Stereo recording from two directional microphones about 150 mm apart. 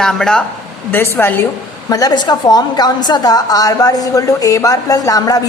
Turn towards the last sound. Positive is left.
turn(degrees=25)  # may be behind; listen again after turning